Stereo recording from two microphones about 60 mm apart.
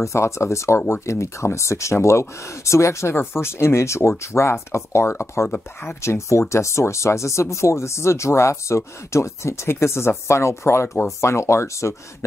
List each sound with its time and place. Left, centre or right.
0.0 s speech: left